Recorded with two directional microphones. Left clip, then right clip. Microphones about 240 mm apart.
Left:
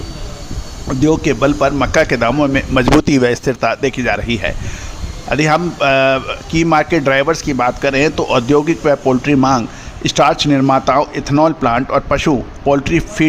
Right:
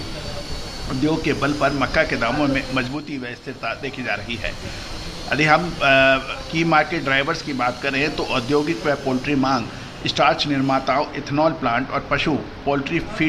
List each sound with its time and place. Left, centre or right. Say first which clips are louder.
1.0 s speech: left 8 dB; left